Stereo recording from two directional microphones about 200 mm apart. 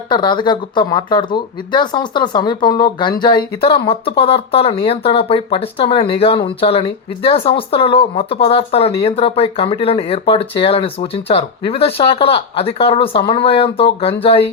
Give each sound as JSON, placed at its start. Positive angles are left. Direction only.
{"t": 0.1, "sound": "speech", "side_deg": 20}